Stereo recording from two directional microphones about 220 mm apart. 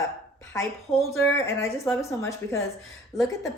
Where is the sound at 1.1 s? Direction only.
10° left (ahead or behind).